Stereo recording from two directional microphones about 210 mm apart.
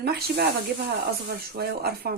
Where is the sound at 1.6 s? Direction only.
45° right (ahead or behind).